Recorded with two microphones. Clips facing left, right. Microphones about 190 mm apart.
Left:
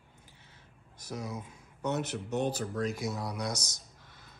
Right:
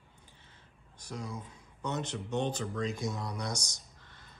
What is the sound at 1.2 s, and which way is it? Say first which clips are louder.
Speech: left 2 dB; 10° left (ahead or behind).